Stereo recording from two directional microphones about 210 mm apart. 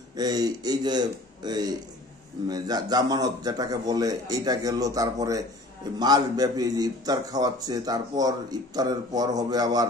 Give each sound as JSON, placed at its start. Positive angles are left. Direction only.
{"t": 0.1, "sound": "a man's voice", "side_deg": -20}